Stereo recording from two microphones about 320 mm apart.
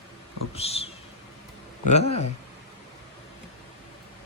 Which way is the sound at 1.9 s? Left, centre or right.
Centre.